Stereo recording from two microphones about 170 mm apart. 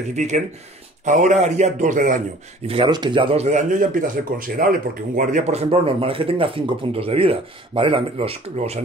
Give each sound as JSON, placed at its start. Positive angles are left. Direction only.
{"t": 0.1, "sound": "speech", "side_deg": -45}
{"t": 2.6, "sound": "speech", "side_deg": -30}
{"t": 5.5, "sound": "speech", "side_deg": -35}